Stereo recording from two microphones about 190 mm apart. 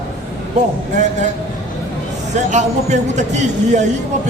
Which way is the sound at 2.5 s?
40° right (ahead or behind).